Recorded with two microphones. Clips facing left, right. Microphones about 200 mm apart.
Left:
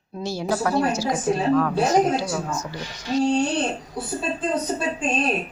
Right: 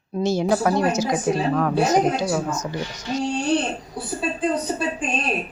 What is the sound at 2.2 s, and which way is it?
Speech, 20° right (ahead or behind).